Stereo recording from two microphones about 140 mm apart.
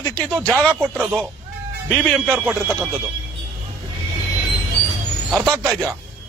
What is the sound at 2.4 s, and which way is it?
Speech, 5° right (ahead or behind).